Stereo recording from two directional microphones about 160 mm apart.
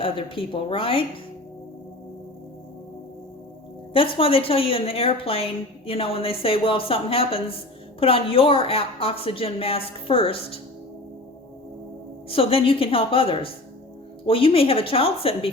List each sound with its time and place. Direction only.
0.0 s a woman's voice: 35° left (ahead or behind)
3.9 s a woman's voice: 35° left (ahead or behind)
12.3 s a woman's voice: 35° left (ahead or behind)